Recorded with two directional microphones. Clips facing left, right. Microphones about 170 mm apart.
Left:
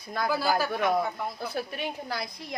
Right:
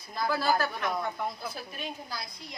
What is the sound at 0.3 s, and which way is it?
Speech, 10° left (ahead or behind).